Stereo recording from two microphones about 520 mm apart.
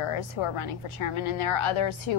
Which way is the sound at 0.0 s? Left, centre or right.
Left.